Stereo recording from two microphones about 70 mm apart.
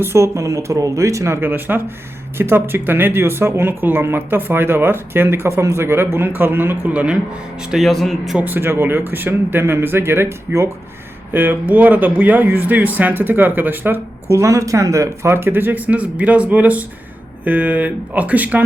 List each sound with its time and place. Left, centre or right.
0.0 s speech: right
6.9 s speech: centre
7.7 s a man's voice: centre
8.4 s speech: right
14.3 s speech: right